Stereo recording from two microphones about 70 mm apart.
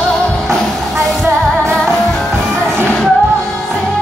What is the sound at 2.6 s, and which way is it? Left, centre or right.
Music, centre.